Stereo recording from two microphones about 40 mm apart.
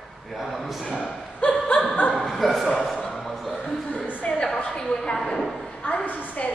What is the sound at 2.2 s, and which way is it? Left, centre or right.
Speech, centre.